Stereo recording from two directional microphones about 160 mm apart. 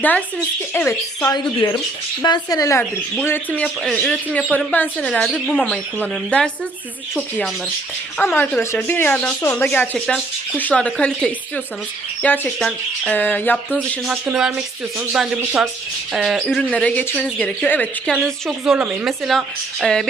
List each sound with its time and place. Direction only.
0.7 s speech: 15° left (ahead or behind)
1.3 s a woman's voice: 30° left (ahead or behind); by 5.8 s 5° right (ahead or behind)
6.0 s speech: 5° left (ahead or behind)
8.2 s speech: 10° left (ahead or behind)
14.1 s a woman's voice: 5° right (ahead or behind)